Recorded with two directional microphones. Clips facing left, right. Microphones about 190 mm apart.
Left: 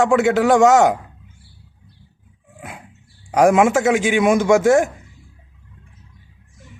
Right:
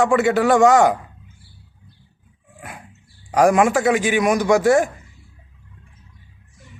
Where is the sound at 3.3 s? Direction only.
Centre (ahead or behind).